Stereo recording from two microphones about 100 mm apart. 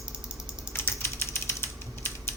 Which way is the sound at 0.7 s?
25° left (ahead or behind).